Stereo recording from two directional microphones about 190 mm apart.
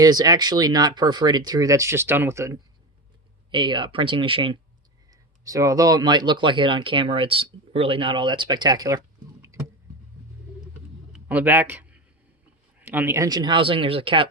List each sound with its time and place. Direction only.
0.0 s speech: 20° right (ahead or behind)
3.5 s speech: 25° right (ahead or behind)
11.1 s speech: 10° right (ahead or behind); by 14.3 s 30° right (ahead or behind)